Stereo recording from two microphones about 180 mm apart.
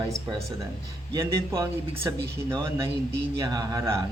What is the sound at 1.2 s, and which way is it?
Speech, 15° right (ahead or behind).